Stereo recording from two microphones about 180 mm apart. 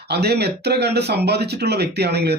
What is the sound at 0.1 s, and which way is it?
Speech, 65° right (ahead or behind).